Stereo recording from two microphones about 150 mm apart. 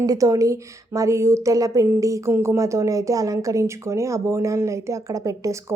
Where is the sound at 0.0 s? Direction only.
25° right (ahead or behind).